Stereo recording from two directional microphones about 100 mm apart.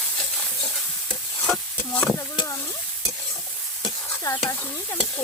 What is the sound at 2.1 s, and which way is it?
Stir, 35° left (ahead or behind).